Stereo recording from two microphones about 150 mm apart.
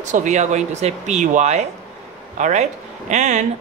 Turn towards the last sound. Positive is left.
turn(degrees=-50)  # may be behind; listen again after turning